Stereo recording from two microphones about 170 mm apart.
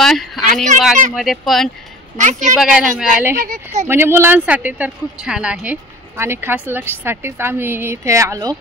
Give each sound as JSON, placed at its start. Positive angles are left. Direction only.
{"t": 0.0, "sound": "speech", "side_deg": 0}
{"t": 2.1, "sound": "speech", "side_deg": -45}
{"t": 2.6, "sound": "speech", "side_deg": -5}
{"t": 3.3, "sound": "speech", "side_deg": -55}
{"t": 3.8, "sound": "speech", "side_deg": -15}